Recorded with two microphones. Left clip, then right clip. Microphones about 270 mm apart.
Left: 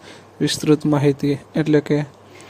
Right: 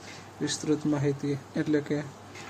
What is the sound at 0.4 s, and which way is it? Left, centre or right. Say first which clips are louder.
Speech: left 11 dB; left.